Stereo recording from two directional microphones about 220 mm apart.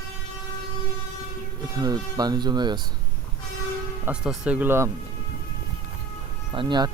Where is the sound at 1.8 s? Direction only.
15° right (ahead or behind).